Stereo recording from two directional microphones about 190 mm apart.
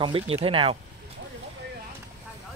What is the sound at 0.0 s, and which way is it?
Speech, 30° right (ahead or behind).